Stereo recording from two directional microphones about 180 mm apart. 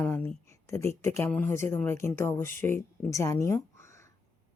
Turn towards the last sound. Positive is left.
turn(degrees=15)  # may be behind; listen again after turning